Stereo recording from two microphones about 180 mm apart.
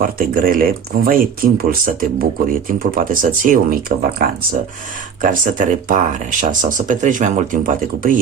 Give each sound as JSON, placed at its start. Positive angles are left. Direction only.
{"t": 0.0, "sound": "speech", "side_deg": -50}